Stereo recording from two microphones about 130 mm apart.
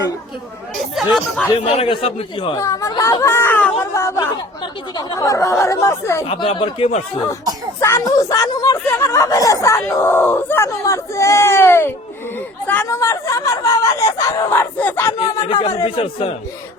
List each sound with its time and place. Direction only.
0.8 s speech: centre (ahead or behind)
1.6 s a man's voice: 45° left (ahead or behind)
2.6 s speech: 25° left (ahead or behind)
4.6 s speech: 35° left (ahead or behind)
6.2 s a man's voice: 40° left (ahead or behind)
7.8 s speech: 20° left (ahead or behind)
15.4 s a man's voice: 45° left (ahead or behind)